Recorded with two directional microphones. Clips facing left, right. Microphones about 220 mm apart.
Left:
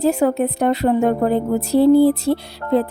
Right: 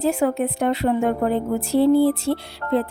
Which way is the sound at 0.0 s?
40° left (ahead or behind).